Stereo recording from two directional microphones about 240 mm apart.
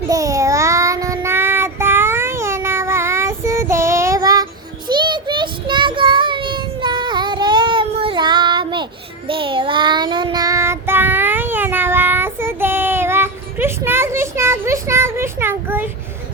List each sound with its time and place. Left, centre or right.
0.1 s child singing: centre